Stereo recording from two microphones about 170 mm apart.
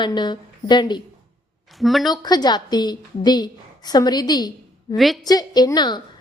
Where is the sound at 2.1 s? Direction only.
25° left (ahead or behind).